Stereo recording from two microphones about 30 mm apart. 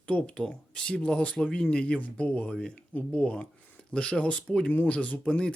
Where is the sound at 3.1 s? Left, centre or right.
Left.